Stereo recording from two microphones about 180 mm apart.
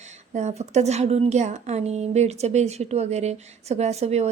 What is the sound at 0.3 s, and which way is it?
A woman's voice, 40° right (ahead or behind).